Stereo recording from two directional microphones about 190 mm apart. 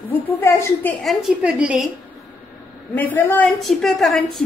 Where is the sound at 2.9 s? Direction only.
10° left (ahead or behind).